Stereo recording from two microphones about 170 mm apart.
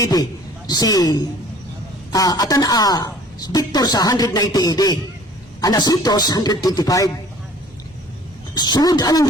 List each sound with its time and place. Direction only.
0.0 s a woman's voice: 20° left (ahead or behind)
8.5 s a woman's voice: 25° left (ahead or behind)